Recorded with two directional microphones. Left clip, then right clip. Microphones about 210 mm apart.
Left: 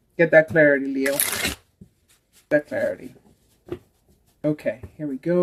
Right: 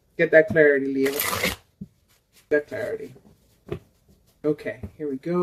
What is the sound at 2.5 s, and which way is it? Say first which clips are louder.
Speech: left 3 dB; 45° left (ahead or behind).